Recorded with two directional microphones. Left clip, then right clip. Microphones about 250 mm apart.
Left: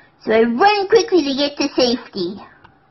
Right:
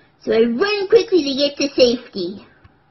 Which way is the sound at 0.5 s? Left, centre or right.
Centre.